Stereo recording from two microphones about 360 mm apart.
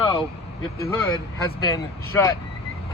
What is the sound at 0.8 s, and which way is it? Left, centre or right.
Speech, centre.